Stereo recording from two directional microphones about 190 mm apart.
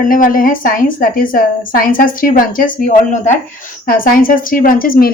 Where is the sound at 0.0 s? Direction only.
45° left (ahead or behind).